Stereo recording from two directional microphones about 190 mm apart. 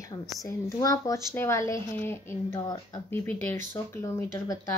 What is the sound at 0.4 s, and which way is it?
Speech, 15° left (ahead or behind).